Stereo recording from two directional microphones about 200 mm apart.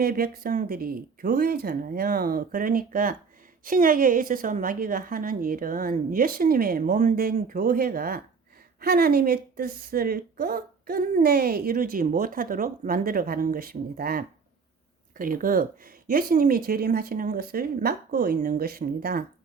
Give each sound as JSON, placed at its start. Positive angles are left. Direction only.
{"t": 0.0, "sound": "a woman's voice", "side_deg": -50}